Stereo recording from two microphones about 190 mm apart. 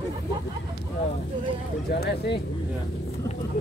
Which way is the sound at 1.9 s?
60° left (ahead or behind).